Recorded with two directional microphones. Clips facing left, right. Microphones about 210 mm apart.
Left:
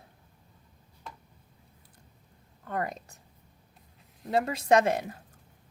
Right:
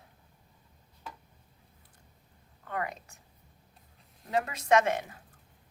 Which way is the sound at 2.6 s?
35° left (ahead or behind).